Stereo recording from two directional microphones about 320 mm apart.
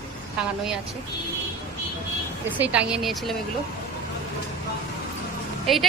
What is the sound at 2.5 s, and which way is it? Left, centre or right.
Speech, centre.